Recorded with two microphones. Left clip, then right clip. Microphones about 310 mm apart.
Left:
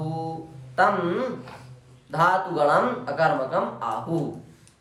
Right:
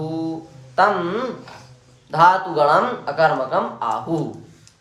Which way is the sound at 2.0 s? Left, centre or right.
Centre.